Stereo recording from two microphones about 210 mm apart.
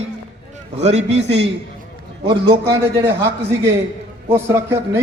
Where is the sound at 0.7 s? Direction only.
30° right (ahead or behind).